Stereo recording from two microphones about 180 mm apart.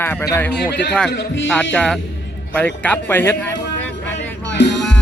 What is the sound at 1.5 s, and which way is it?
A man's voice, 5° left (ahead or behind).